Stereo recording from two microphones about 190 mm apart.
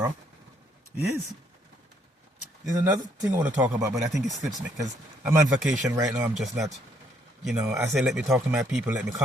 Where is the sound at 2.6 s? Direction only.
15° right (ahead or behind).